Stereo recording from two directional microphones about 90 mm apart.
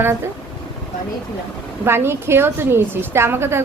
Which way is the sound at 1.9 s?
25° right (ahead or behind).